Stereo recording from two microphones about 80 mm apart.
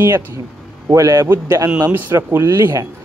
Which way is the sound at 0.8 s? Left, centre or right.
Right.